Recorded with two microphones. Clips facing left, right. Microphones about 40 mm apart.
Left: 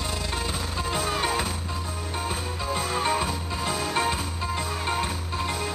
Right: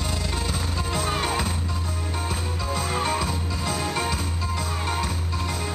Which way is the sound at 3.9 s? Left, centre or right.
Centre.